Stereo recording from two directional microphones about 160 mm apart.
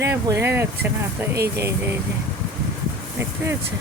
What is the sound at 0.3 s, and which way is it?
Speech, 15° right (ahead or behind).